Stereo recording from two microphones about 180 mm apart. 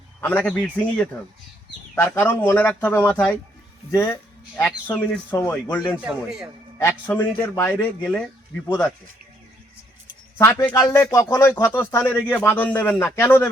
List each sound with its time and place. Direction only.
0.2 s speech: 10° left (ahead or behind)
6.0 s a man's voice: 5° right (ahead or behind)
6.7 s speech: 15° left (ahead or behind)
10.3 s speech: 15° left (ahead or behind)